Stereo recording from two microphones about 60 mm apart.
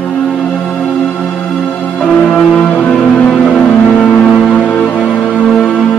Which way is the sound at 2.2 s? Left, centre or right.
Centre.